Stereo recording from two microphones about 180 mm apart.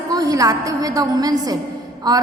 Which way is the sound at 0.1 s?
20° right (ahead or behind).